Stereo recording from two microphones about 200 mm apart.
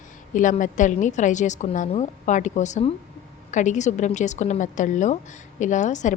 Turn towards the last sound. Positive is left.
turn(degrees=35)  # may be behind; listen again after turning